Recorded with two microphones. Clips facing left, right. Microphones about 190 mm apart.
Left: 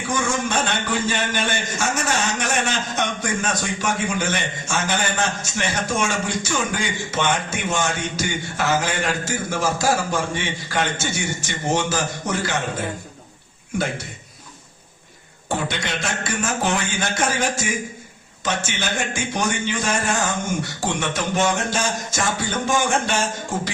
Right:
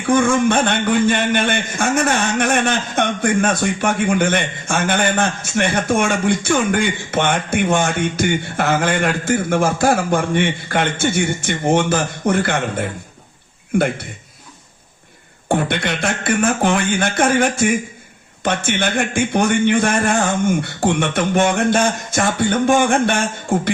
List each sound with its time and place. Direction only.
0.1 s a man's voice: 55° right (ahead or behind)
15.4 s a man's voice: 55° right (ahead or behind)